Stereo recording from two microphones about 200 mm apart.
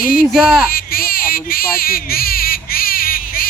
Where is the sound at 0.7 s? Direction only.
45° left (ahead or behind).